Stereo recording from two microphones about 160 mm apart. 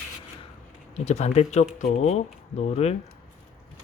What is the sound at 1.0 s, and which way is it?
Speech, 45° left (ahead or behind).